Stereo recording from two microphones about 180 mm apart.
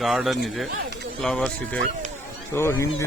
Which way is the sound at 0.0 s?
Centre (ahead or behind).